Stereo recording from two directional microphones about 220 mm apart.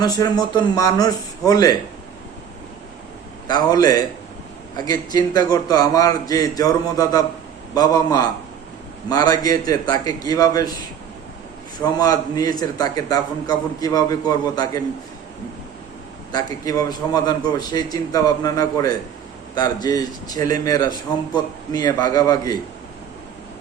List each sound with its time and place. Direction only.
0.0 s a man's voice: 15° left (ahead or behind)
3.4 s a man's voice: 15° left (ahead or behind)
11.8 s a man's voice: 15° left (ahead or behind)
16.3 s a man's voice: 15° left (ahead or behind)